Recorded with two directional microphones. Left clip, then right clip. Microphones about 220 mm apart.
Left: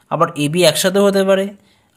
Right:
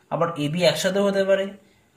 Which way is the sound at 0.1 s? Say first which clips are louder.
Left 8 dB; 45° left (ahead or behind).